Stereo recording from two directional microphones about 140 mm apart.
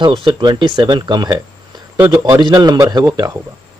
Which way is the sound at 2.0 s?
20° right (ahead or behind).